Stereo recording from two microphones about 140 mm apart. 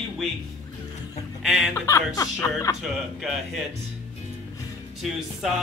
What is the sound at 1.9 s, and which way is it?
Speech, 25° left (ahead or behind).